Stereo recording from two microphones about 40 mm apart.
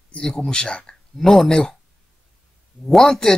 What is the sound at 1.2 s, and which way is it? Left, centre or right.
Speech, centre.